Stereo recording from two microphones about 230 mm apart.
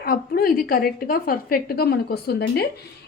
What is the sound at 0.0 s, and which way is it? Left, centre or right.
A woman's voice, left.